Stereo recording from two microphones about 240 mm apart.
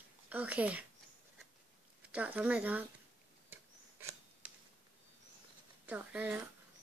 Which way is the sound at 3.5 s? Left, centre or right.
Centre.